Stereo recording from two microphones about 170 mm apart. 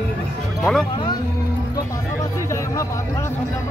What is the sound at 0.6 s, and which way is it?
Speech, 5° left (ahead or behind).